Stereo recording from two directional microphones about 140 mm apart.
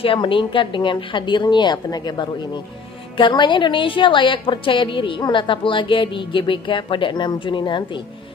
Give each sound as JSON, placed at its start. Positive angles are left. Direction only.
{"t": 0.0, "sound": "a woman's voice", "side_deg": 40}